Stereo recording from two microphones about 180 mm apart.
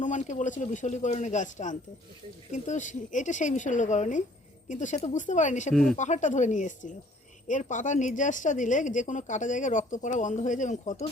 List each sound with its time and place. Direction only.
0.0 s speech: 45° left (ahead or behind)
5.7 s speech: centre (ahead or behind)
6.0 s speech: 40° left (ahead or behind)